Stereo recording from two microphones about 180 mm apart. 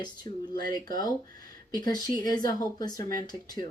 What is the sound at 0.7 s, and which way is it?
A woman's voice, 20° left (ahead or behind).